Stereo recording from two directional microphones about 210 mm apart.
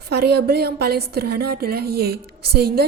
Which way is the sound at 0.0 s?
50° right (ahead or behind).